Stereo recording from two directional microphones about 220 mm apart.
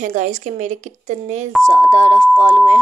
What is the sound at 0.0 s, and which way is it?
Speech, 35° right (ahead or behind).